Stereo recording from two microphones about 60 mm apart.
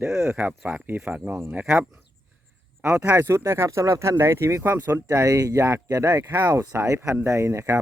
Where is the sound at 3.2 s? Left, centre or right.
Right.